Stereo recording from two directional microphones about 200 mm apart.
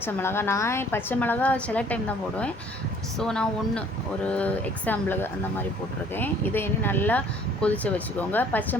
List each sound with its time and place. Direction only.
0.0 s a woman's voice: 10° left (ahead or behind)